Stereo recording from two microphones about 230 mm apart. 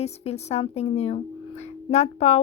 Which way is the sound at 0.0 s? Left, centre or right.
Left.